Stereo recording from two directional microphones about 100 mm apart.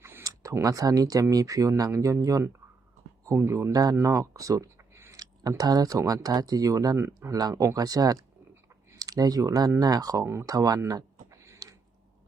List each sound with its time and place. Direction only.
0.0 s speech: 25° right (ahead or behind)
4.0 s a sound: 35° right (ahead or behind)
5.2 s speech: 40° right (ahead or behind)